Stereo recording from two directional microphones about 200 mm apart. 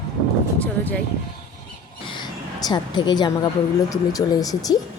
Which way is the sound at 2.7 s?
20° left (ahead or behind).